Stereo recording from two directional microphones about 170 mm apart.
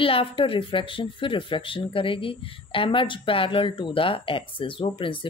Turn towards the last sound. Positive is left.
turn(degrees=30)  # may be behind; listen again after turning